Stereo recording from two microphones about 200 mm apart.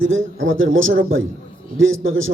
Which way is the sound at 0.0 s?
75° right (ahead or behind).